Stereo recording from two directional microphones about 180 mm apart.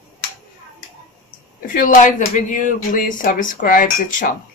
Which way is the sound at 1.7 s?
45° left (ahead or behind).